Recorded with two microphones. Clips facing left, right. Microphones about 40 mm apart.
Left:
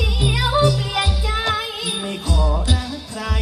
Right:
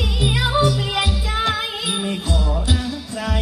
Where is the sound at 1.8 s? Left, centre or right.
Right.